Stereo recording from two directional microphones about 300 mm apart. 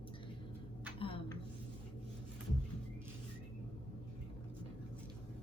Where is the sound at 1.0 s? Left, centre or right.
Centre.